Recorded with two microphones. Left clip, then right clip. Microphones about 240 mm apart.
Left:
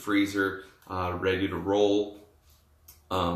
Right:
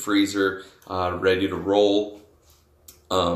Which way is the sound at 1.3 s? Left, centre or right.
Centre.